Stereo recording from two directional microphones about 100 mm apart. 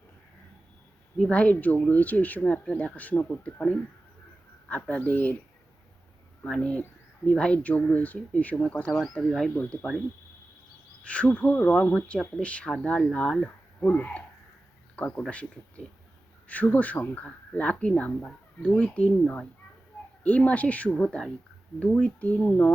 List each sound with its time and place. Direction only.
1.2 s speech: 10° left (ahead or behind)
6.4 s speech: 10° left (ahead or behind)
11.0 s speech: 10° left (ahead or behind)